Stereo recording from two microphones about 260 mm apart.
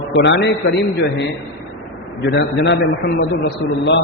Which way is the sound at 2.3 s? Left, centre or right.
Left.